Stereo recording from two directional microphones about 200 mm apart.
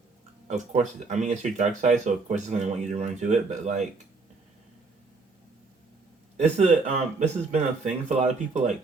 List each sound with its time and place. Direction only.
0.4 s speech: 35° right (ahead or behind)
6.3 s speech: 35° right (ahead or behind)